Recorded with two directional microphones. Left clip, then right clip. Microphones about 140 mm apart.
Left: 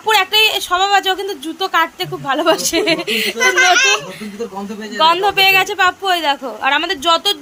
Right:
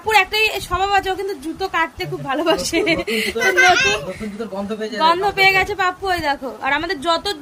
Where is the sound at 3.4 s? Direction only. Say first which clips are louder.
Left 2 dB; 55° right (ahead or behind).